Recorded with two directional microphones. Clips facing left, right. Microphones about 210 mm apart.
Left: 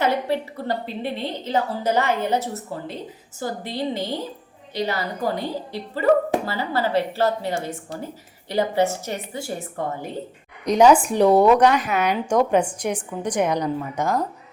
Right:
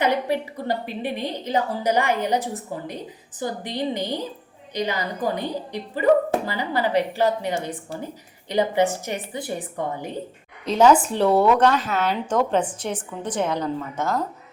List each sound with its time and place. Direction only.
0.0 s a woman's voice: 15° right (ahead or behind)
10.7 s a woman's voice: 15° left (ahead or behind)